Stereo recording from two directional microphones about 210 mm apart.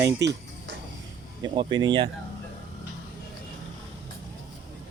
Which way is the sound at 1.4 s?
20° right (ahead or behind).